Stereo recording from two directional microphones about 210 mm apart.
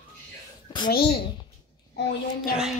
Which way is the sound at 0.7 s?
20° left (ahead or behind).